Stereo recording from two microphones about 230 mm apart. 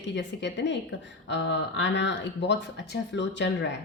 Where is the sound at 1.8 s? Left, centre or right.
Left.